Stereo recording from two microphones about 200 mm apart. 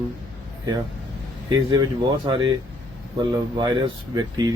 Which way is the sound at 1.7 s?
20° right (ahead or behind).